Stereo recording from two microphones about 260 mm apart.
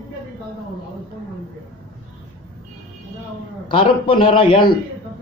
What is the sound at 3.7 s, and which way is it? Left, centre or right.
Speech, centre.